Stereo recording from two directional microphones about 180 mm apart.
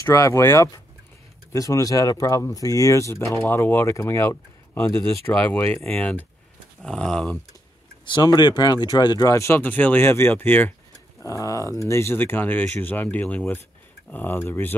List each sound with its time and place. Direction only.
0.0 s speech: 15° left (ahead or behind)
8.0 s speech: 25° left (ahead or behind)